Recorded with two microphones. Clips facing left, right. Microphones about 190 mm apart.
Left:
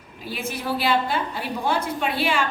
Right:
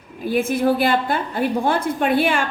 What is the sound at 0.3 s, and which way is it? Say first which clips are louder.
A woman's voice: right 10 dB; 50° right (ahead or behind).